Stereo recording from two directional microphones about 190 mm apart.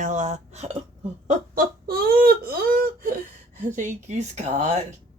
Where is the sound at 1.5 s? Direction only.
50° right (ahead or behind).